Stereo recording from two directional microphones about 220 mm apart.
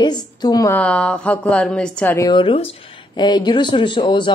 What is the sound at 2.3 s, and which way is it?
Speech, 25° left (ahead or behind).